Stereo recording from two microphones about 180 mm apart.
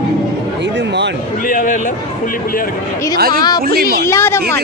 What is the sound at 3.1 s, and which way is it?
Speech, 55° right (ahead or behind).